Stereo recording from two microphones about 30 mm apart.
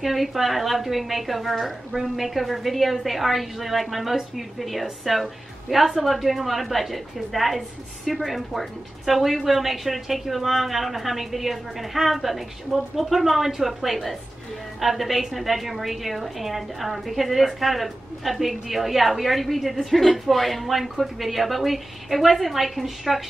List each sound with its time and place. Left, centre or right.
0.0 s a woman's voice: centre
1.9 s a woman's voice: centre
2.1 s a woman's voice: centre